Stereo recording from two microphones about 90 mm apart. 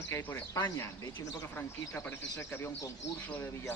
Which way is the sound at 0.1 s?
25° left (ahead or behind).